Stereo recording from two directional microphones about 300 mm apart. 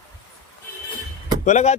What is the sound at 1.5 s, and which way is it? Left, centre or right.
Speech, left.